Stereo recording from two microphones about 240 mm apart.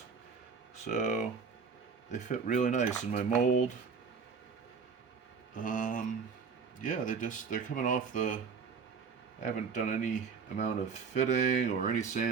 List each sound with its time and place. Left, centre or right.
0.9 s speech: left
5.5 s speech: left
9.4 s speech: left
11.1 s speech: left